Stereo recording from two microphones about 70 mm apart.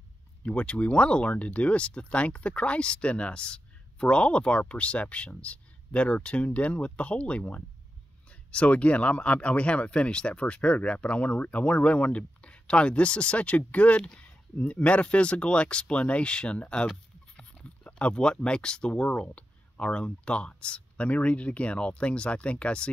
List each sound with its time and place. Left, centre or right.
0.4 s speech: centre